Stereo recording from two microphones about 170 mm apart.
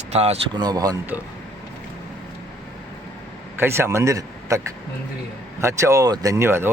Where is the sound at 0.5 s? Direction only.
25° right (ahead or behind).